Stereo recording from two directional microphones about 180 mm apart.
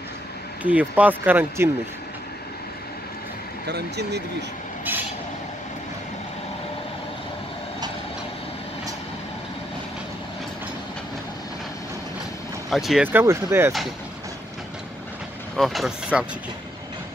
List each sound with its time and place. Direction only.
0.7 s speech: 10° right (ahead or behind)
3.6 s speech: 65° right (ahead or behind)
12.6 s speech: centre (ahead or behind)
15.5 s speech: centre (ahead or behind)